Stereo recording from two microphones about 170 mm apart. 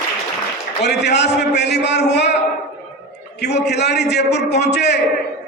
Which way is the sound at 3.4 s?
80° left.